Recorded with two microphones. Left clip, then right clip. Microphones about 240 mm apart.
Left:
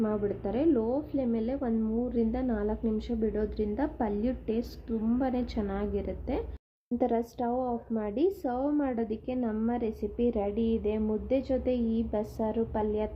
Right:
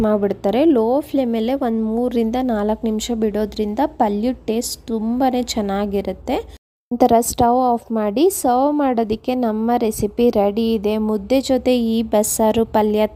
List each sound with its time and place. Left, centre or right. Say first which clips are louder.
0.0 s a woman's voice: right 13 dB; right